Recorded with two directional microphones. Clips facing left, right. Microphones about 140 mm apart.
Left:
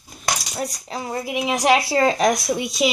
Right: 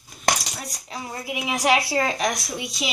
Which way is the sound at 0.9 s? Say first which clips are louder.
Left 1 dB; 30° left (ahead or behind).